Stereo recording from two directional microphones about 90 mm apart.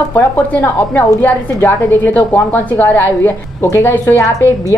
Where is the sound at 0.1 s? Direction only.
20° left (ahead or behind).